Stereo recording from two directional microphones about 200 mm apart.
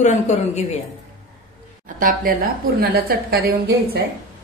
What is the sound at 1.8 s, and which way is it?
A woman's voice, 45° right (ahead or behind).